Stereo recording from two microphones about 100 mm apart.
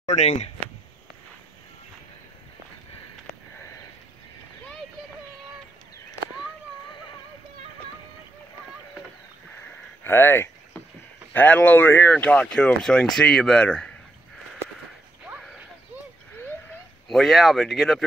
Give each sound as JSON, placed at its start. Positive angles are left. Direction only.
{"t": 10.0, "sound": "a sound", "side_deg": 25}
{"t": 11.3, "sound": "speech", "side_deg": 15}
{"t": 17.1, "sound": "speech", "side_deg": 0}